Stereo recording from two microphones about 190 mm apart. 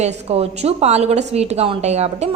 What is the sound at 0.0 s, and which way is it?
A woman's voice, 35° right (ahead or behind).